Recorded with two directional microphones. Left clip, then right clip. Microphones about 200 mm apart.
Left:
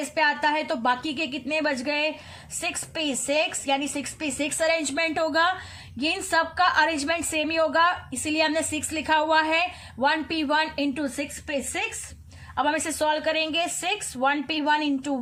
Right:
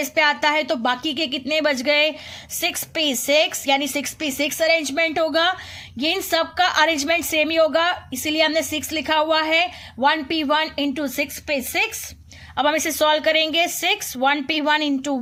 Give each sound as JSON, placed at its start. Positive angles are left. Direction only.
{"t": 0.1, "sound": "a woman's voice", "side_deg": -30}